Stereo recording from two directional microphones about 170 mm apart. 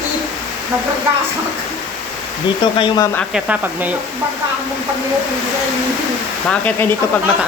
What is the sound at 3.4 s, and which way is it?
Speech, 10° right (ahead or behind).